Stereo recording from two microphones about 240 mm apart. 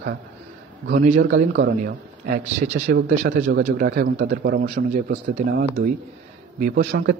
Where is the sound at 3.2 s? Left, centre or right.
Right.